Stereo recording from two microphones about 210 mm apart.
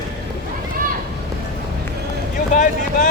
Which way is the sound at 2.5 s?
40° left (ahead or behind).